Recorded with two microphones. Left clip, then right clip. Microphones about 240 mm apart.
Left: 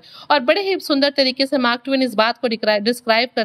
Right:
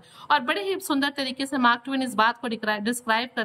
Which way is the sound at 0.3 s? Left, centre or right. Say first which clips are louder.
Left 7 dB; centre.